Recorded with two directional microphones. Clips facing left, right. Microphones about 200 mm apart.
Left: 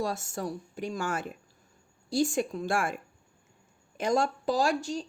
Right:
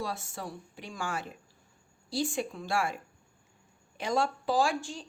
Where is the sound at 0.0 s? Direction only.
45° left (ahead or behind).